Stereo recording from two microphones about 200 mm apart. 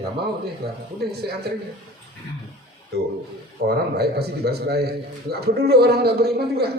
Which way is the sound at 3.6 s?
55° right (ahead or behind).